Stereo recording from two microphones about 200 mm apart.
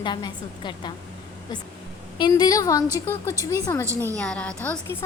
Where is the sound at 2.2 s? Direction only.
20° left (ahead or behind).